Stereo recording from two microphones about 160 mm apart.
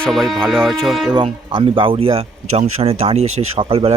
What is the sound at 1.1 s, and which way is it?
Speech, 30° right (ahead or behind).